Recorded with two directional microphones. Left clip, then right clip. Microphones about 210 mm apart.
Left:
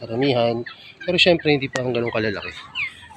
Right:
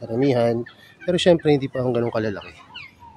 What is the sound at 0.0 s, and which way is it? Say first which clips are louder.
Speech: even; 35° right (ahead or behind).